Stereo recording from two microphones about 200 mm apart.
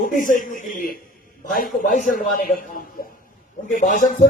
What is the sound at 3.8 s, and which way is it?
Speech, 40° left (ahead or behind).